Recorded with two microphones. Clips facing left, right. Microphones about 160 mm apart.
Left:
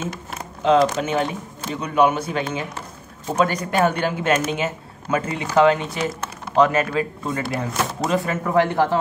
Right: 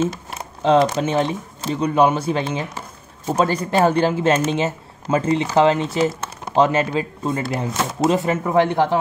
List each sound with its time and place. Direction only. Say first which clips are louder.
0.7 s speech: right 1 dB; 35° right (ahead or behind)